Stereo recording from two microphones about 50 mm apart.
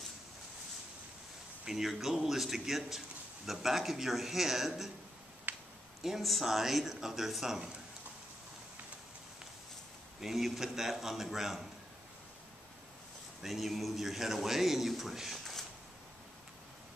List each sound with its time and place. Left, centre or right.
1.6 s a man's voice: centre
5.5 s a sound: right
6.0 s a man's voice: centre
10.2 s a man's voice: centre
13.4 s a man's voice: centre